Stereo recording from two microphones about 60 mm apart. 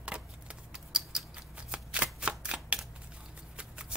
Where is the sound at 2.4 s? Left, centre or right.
Centre.